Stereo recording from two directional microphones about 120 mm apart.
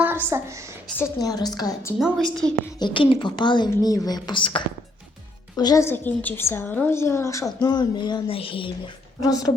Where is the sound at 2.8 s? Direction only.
45° left (ahead or behind).